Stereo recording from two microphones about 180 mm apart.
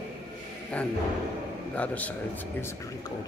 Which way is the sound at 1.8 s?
10° left (ahead or behind).